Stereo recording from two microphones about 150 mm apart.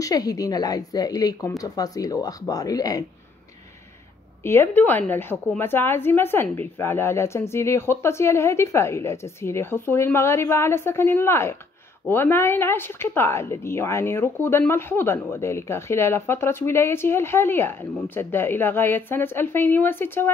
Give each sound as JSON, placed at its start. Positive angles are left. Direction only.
{"t": 0.0, "sound": "speech", "side_deg": 25}
{"t": 4.4, "sound": "a woman's voice", "side_deg": 15}